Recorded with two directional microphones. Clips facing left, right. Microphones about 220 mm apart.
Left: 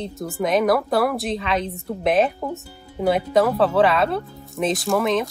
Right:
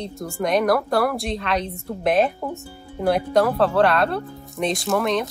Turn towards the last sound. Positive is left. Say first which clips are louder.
# left 1 dB
turn(degrees=0)  # may be behind; listen again after turning